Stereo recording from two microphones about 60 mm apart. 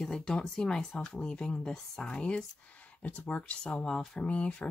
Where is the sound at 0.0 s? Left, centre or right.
Centre.